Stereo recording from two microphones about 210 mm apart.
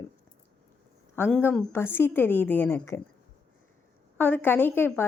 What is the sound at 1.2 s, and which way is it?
Speech, 5° left (ahead or behind).